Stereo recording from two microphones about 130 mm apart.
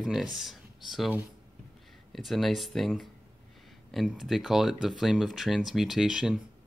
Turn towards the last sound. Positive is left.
turn(degrees=-5)  # may be behind; listen again after turning